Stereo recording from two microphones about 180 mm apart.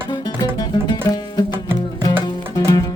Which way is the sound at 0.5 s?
25° left (ahead or behind).